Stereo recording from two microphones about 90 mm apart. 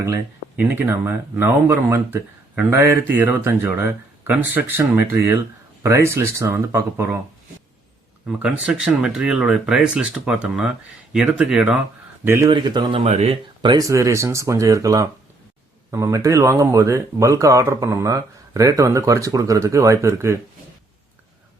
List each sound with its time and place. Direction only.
0.5 s speech: 20° right (ahead or behind)
8.4 s speech: 10° right (ahead or behind)
12.2 s speech: 30° right (ahead or behind)
12.5 s speech: 60° right (ahead or behind)
12.9 s speech: 90° right
13.7 s speech: 40° right (ahead or behind)